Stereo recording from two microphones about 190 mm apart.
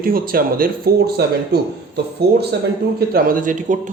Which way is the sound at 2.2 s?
60° right (ahead or behind).